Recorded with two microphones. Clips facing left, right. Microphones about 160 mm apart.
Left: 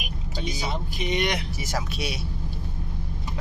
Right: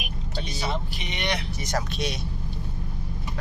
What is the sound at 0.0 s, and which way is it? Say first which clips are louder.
Vehicle: left 2 dB; 5° left (ahead or behind).